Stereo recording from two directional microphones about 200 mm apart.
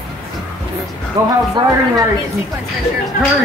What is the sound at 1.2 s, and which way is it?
Speech, 15° right (ahead or behind).